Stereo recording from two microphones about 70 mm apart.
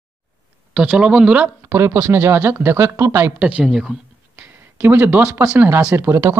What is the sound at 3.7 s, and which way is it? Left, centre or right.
Speech, centre.